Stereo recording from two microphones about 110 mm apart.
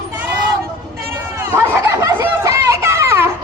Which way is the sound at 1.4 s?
25° right (ahead or behind).